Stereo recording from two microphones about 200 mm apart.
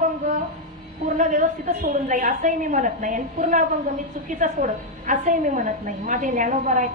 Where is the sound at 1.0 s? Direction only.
40° right (ahead or behind).